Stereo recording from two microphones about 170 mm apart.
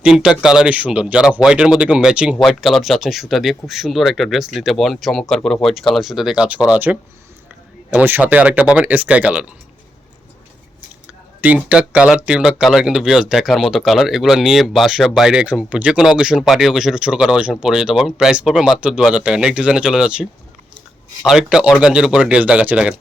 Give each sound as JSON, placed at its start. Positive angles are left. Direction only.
{"t": 0.0, "sound": "speech", "side_deg": -5}
{"t": 11.3, "sound": "speech", "side_deg": -10}
{"t": 21.2, "sound": "speech", "side_deg": -5}